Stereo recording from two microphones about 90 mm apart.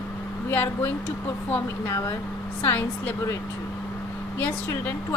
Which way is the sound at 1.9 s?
35° left (ahead or behind).